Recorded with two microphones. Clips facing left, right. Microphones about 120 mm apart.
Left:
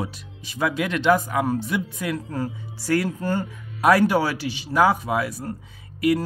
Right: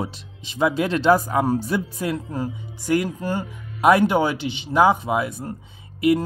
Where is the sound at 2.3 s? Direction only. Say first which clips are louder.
Right 1 dB; 15° right (ahead or behind).